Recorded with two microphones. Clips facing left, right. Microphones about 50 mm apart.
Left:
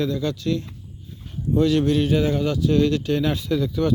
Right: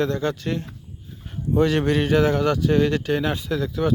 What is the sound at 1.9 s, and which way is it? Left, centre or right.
Speech, right.